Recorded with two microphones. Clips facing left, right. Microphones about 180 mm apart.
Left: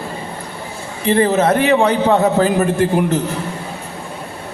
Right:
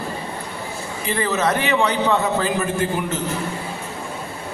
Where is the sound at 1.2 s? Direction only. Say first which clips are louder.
Left 6 dB; 50° left (ahead or behind).